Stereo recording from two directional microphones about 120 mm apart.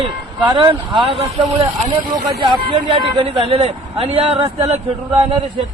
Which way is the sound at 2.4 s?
45° right (ahead or behind).